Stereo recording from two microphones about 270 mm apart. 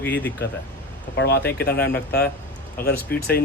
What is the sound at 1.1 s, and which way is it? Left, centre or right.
Speech, left.